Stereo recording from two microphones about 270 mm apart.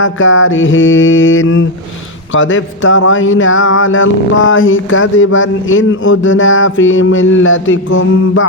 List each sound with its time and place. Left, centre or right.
0.0 s speech: left